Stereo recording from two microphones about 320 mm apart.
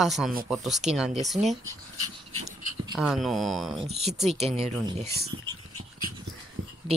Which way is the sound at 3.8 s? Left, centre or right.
Centre.